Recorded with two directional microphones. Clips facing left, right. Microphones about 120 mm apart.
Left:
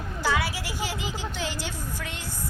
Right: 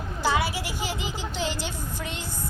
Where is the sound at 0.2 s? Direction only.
15° right (ahead or behind).